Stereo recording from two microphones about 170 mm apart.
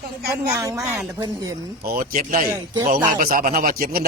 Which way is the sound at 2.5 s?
15° right (ahead or behind).